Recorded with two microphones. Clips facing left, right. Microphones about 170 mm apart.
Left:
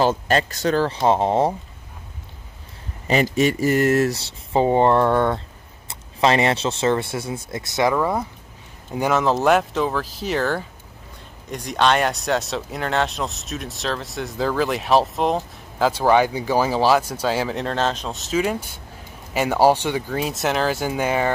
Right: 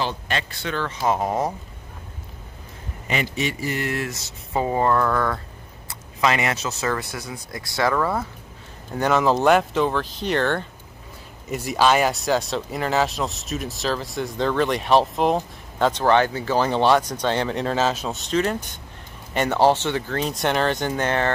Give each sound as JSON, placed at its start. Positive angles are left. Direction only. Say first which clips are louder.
{"t": 0.0, "sound": "speech", "louder": "left 8 dB", "side_deg": 40}
{"t": 3.1, "sound": "speech", "louder": "left 7 dB", "side_deg": 40}
{"t": 8.9, "sound": "speech", "louder": "even", "side_deg": 5}